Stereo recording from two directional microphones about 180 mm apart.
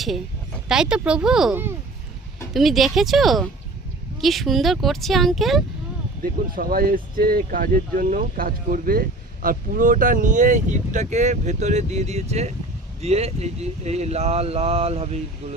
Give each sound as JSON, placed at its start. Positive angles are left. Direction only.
{"t": 0.7, "sound": "speech", "side_deg": -5}
{"t": 6.5, "sound": "speech", "side_deg": -55}